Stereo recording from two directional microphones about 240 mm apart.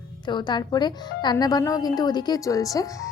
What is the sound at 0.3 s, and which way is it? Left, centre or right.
Speech, centre.